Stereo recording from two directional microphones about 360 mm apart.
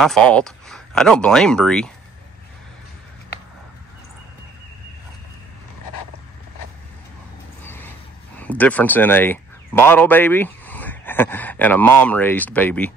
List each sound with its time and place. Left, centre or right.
0.0 s speech: centre
7.6 s vehicle: centre
8.4 s speech: centre